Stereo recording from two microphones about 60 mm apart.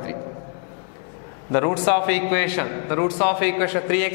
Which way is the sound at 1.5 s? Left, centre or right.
Centre.